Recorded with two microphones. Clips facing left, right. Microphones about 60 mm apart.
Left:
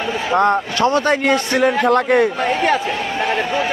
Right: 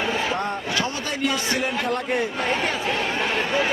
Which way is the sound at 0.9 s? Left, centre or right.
Left.